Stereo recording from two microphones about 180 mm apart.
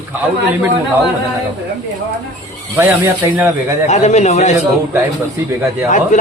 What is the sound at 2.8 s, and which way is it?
Speech, 10° right (ahead or behind).